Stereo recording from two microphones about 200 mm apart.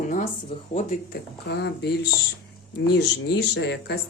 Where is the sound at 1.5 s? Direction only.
55° left (ahead or behind).